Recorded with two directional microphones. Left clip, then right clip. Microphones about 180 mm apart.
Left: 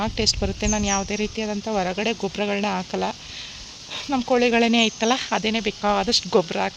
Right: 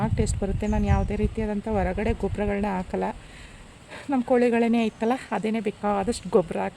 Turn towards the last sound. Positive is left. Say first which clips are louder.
# left 2 dB
turn(degrees=10)  # may be behind; listen again after turning